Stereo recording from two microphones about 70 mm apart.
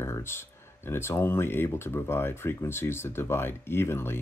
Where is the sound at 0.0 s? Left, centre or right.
Left.